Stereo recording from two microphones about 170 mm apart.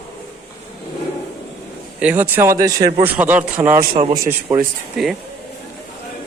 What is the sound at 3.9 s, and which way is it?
Speech, 30° right (ahead or behind).